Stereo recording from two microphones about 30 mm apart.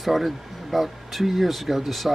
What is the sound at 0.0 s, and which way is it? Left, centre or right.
Speech, centre.